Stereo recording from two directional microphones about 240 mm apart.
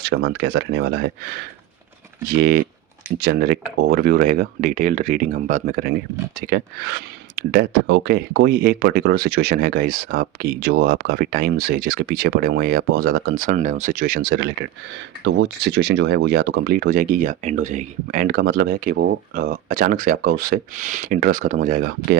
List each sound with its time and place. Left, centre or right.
0.0 s speech: right
2.3 s speech: right